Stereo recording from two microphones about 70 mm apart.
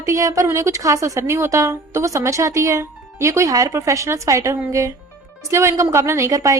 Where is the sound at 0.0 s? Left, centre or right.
Right.